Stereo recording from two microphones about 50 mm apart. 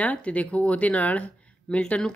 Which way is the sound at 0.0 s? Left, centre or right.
Left.